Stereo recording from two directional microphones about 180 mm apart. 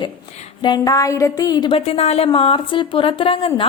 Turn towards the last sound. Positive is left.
turn(degrees=30)  # may be behind; listen again after turning